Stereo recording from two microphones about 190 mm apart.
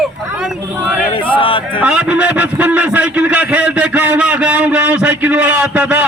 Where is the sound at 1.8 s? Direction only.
5° right (ahead or behind).